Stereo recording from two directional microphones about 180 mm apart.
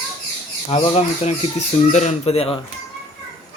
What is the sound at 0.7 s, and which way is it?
Speech, 40° left (ahead or behind).